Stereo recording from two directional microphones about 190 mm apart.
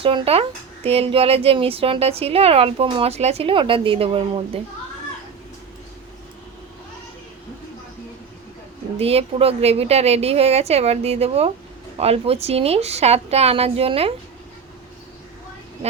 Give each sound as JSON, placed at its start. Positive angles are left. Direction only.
{"t": 0.0, "sound": "speech", "side_deg": -30}
{"t": 9.0, "sound": "speech", "side_deg": -30}